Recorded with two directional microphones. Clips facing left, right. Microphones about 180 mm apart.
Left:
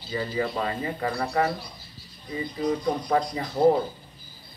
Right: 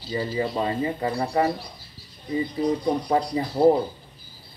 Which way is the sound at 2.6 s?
30° right (ahead or behind).